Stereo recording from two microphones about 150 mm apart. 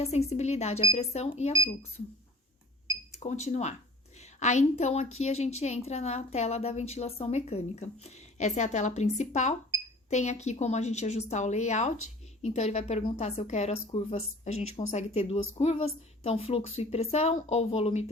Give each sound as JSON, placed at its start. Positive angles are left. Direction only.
{"t": 0.0, "sound": "a woman's voice", "side_deg": 45}
{"t": 3.2, "sound": "a woman's voice", "side_deg": 50}